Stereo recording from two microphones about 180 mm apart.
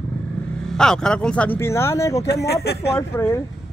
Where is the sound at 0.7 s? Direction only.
5° left (ahead or behind).